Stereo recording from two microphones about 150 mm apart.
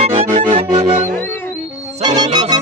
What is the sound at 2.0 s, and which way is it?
Music, 30° right (ahead or behind).